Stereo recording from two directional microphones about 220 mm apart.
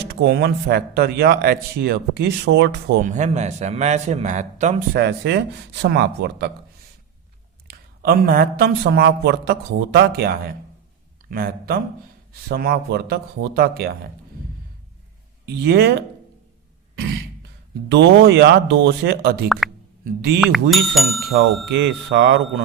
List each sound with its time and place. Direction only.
0.1 s speech: 50° right (ahead or behind)
3.0 s a man's voice: 35° right (ahead or behind)
4.9 s speech: 50° right (ahead or behind)
7.7 s speech: 45° right (ahead or behind)
15.4 s speech: 45° right (ahead or behind)
17.8 s speech: 50° right (ahead or behind)
19.5 s speech: centre (ahead or behind)
20.1 s speech: 45° right (ahead or behind)
20.4 s speech: centre (ahead or behind)
21.7 s speech: 50° right (ahead or behind)